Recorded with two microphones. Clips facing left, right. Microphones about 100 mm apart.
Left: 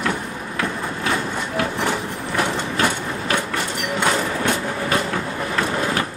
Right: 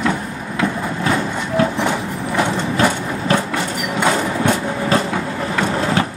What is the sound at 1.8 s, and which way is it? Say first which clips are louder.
Train: right 3 dB; 20° right (ahead or behind).